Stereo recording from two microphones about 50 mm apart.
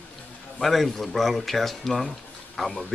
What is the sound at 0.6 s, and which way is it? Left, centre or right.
Speech, centre.